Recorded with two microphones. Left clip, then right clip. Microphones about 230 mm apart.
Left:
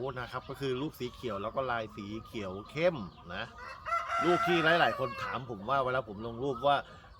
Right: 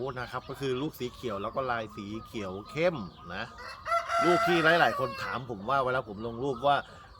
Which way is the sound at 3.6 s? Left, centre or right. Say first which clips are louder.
Right 4 dB; right.